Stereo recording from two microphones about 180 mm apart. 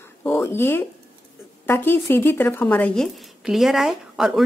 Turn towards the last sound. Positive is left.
turn(degrees=-5)  # may be behind; listen again after turning